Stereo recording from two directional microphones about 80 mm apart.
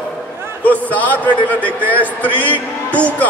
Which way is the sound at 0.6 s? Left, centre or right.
Centre.